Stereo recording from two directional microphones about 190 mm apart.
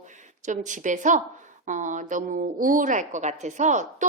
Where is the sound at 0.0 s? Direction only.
40° right (ahead or behind).